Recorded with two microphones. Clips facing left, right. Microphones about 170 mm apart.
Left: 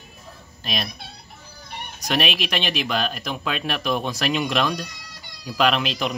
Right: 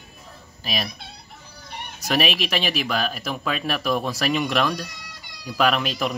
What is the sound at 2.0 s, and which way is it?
Speech, 5° right (ahead or behind).